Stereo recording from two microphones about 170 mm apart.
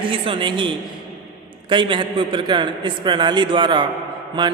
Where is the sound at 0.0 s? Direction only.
30° right (ahead or behind).